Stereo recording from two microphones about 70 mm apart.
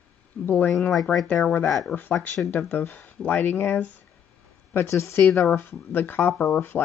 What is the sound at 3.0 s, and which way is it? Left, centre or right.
Speech, left.